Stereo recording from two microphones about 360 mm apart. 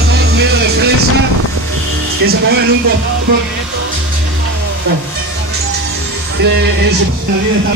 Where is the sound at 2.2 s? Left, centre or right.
Right.